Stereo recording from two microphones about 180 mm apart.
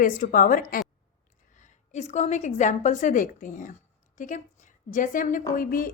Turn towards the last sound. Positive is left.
turn(degrees=50)  # may be behind; listen again after turning